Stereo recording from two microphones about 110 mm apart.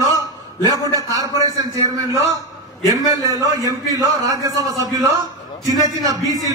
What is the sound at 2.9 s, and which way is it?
A man's voice, 35° right (ahead or behind).